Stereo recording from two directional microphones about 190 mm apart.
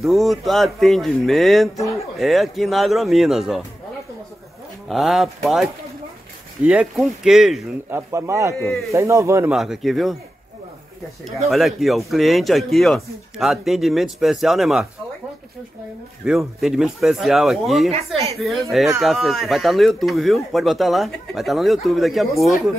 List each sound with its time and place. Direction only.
0.0 s speech: centre (ahead or behind)
4.8 s speech: centre (ahead or behind)
7.9 s speech: 15° right (ahead or behind)
9.5 s speech: centre (ahead or behind)
11.2 s speech: centre (ahead or behind)
16.3 s speech: centre (ahead or behind)
17.9 s a woman's voice: 35° right (ahead or behind)
18.4 s speech: centre (ahead or behind)